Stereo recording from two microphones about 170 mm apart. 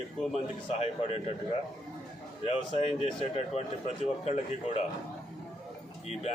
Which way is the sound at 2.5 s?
35° left (ahead or behind).